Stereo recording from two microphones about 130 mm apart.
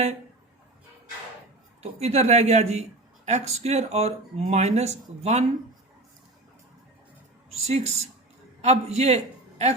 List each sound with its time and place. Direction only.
1.8 s speech: 55° right (ahead or behind)
7.5 s a man's voice: 55° right (ahead or behind)